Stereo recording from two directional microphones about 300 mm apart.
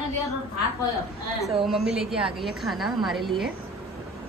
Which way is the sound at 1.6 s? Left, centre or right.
Centre.